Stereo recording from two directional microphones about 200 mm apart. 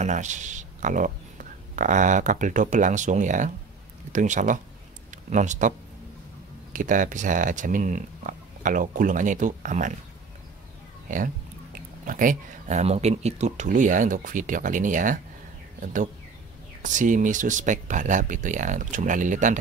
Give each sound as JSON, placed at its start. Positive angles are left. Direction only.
{"t": 0.0, "sound": "speech", "side_deg": -35}
{"t": 12.1, "sound": "speech", "side_deg": -40}